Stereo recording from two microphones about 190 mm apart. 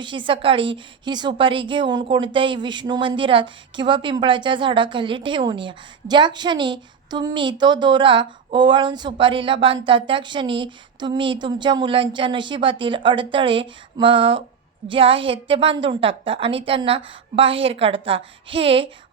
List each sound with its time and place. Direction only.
0.0 s speech: 25° right (ahead or behind)